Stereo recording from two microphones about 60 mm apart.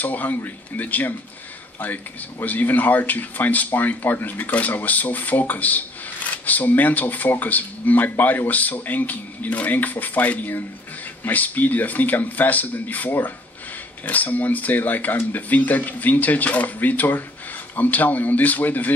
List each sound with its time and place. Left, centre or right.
0.0 s speech: left
2.4 s speech: left